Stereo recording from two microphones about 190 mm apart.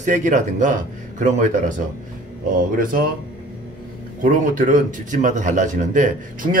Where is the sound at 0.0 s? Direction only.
40° right (ahead or behind).